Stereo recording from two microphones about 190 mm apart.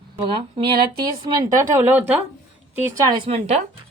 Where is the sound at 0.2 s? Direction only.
25° right (ahead or behind).